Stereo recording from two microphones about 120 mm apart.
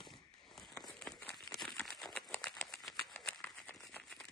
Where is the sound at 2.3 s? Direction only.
5° left (ahead or behind).